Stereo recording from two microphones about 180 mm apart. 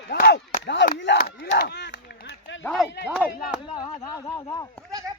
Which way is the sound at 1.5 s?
65° left (ahead or behind).